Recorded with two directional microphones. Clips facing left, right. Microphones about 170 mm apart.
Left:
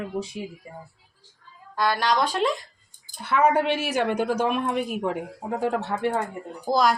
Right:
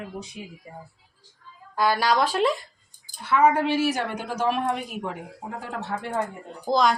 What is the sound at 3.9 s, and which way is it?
Speech, 60° left (ahead or behind).